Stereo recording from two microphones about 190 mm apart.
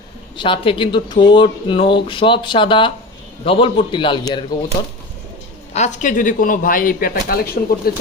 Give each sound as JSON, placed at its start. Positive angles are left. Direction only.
{"t": 0.3, "sound": "speech", "side_deg": 25}
{"t": 5.7, "sound": "a man's voice", "side_deg": 40}